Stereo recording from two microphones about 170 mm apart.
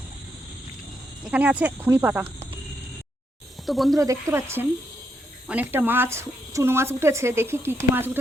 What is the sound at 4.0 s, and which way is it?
Speech, 15° right (ahead or behind).